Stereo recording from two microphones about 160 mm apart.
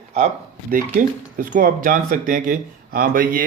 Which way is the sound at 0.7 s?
60° right (ahead or behind).